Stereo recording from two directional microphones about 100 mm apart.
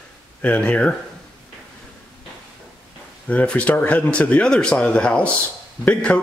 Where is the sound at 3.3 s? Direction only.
15° left (ahead or behind).